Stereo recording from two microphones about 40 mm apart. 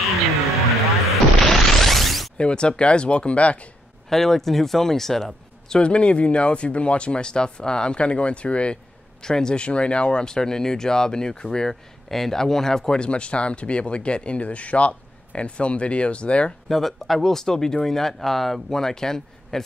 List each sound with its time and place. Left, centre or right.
1.1 s a sound: centre
2.3 s speech: left
4.1 s speech: centre
5.8 s speech: left
9.2 s speech: centre
13.0 s speech: left
16.6 s speech: centre